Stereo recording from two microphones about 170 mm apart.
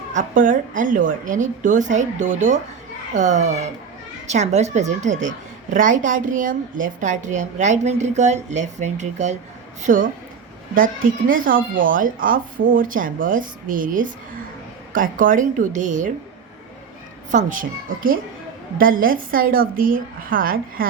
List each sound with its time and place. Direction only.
0.1 s a woman's voice: 50° right (ahead or behind)
17.3 s a woman's voice: 50° right (ahead or behind)